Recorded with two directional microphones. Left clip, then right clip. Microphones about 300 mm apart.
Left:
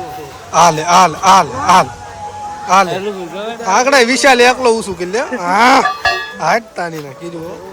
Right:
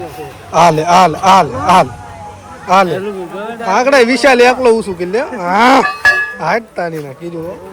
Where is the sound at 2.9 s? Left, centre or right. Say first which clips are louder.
Right 1 dB; left.